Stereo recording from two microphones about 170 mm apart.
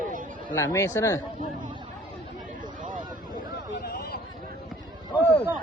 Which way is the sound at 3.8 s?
65° left (ahead or behind).